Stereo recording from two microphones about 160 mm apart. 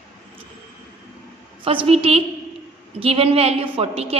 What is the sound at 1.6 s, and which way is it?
A woman's voice, 35° right (ahead or behind).